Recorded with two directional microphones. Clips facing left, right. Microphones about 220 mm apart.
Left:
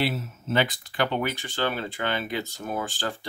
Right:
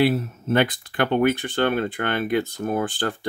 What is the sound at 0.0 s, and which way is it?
Speech, 55° right (ahead or behind).